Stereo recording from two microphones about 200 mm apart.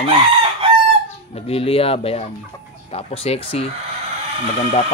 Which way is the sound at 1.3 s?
30° left (ahead or behind).